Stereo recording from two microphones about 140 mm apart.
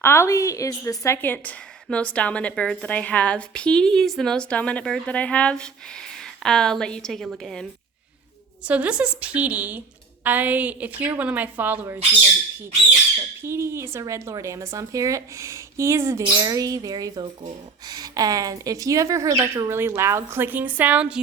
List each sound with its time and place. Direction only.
0.0 s a woman's voice: 20° left (ahead or behind); by 7.7 s centre (ahead or behind)
8.6 s a woman's voice: 10° right (ahead or behind)
13.4 s speech: 20° right (ahead or behind)